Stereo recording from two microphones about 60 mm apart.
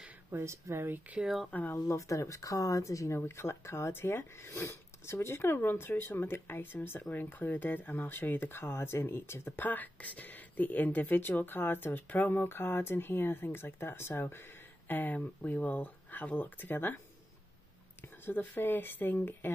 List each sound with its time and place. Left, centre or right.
0.3 s speech: right
1.2 s speech: centre
1.9 s speech: left
3.3 s speech: left
18.0 s speech: left